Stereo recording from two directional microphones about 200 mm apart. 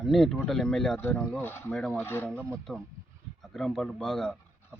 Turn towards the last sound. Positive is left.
turn(degrees=0)  # may be behind; listen again after turning